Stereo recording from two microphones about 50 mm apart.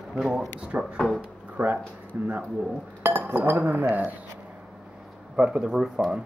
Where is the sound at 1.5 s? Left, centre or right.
Right.